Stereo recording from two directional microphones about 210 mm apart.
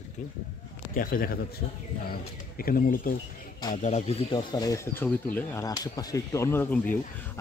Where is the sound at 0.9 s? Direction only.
40° left (ahead or behind); by 6.9 s 10° left (ahead or behind).